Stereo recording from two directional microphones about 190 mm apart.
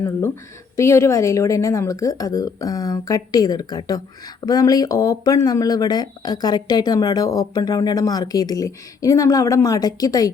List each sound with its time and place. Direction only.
0.8 s a woman's voice: 15° left (ahead or behind)